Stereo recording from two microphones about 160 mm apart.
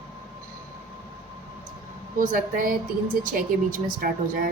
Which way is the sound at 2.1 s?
60° right (ahead or behind).